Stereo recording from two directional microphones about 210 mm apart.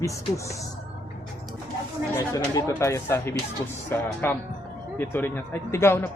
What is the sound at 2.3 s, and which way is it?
Speech, 15° left (ahead or behind).